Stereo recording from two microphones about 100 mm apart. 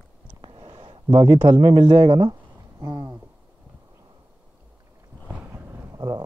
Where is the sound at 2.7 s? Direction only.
40° right (ahead or behind).